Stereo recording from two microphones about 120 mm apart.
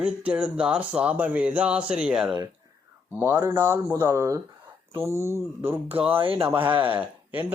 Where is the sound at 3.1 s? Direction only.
20° right (ahead or behind).